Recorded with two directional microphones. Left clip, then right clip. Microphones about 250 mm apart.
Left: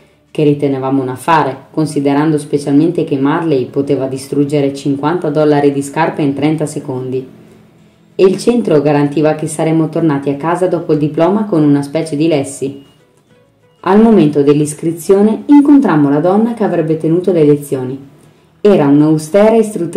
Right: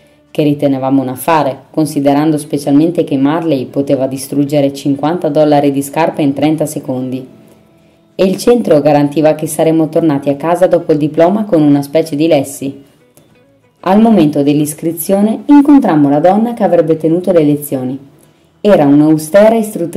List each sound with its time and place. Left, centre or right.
0.3 s speech: right
8.2 s speech: right
13.7 s speech: right